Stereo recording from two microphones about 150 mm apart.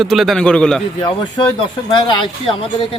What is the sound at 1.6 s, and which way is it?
Speech, 35° left (ahead or behind).